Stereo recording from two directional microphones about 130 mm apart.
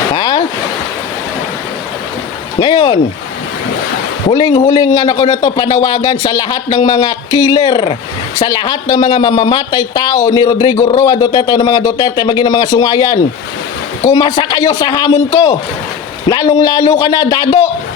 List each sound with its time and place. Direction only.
0.1 s a sound: 35° left (ahead or behind)
2.6 s speech: 35° left (ahead or behind)
4.3 s speech: 35° left (ahead or behind)